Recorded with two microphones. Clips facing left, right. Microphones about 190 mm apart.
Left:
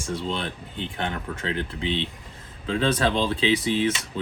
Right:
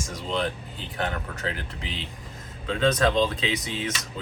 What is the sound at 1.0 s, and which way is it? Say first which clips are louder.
Speech: right 1 dB; 40° right (ahead or behind).